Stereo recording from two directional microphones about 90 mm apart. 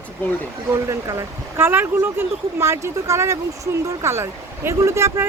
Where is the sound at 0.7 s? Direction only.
35° right (ahead or behind).